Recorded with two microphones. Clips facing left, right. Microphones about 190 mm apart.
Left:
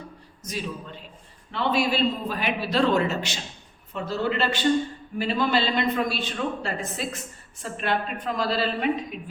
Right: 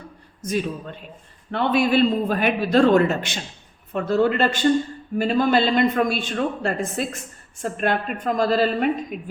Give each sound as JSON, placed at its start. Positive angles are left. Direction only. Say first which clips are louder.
{"t": 0.4, "sound": "a man's voice", "louder": "right 8 dB", "side_deg": -55}